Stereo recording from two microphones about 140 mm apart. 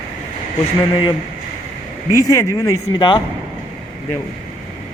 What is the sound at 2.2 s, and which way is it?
Speech, 20° left (ahead or behind).